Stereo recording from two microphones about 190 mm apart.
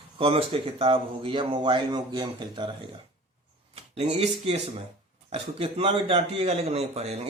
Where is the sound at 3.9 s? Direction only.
35° right (ahead or behind).